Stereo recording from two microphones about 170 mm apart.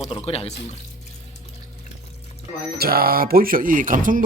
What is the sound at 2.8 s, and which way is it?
Speech, 60° right (ahead or behind).